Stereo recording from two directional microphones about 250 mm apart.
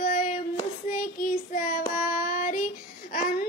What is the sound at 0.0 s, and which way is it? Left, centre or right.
Child singing, left.